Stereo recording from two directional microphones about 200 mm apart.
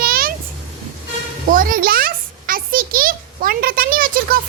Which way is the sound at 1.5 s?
45° right (ahead or behind).